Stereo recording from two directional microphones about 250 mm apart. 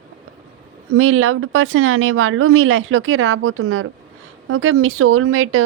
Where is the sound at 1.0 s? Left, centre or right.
Right.